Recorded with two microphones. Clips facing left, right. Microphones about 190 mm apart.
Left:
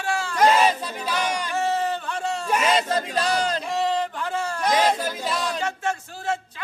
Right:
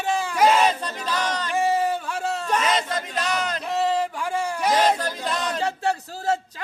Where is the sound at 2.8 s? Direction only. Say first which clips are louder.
Left 3 dB; 35° left (ahead or behind).